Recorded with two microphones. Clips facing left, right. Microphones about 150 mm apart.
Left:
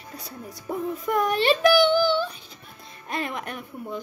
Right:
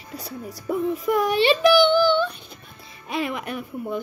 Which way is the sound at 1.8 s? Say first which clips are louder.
Right 2 dB; 60° right (ahead or behind).